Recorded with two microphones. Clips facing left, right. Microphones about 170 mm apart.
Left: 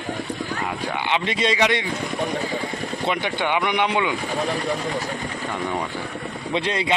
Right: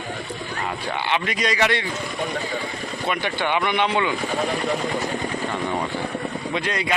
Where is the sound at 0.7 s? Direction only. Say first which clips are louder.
Right 1 dB; 15° left (ahead or behind).